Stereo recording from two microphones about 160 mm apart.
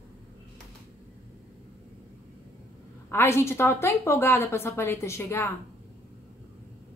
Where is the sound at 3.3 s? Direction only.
15° left (ahead or behind).